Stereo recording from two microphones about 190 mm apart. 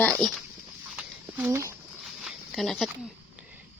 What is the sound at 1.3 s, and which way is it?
Speech, 15° right (ahead or behind).